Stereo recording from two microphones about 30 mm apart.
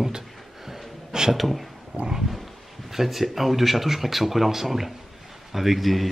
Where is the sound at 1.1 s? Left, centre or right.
Right.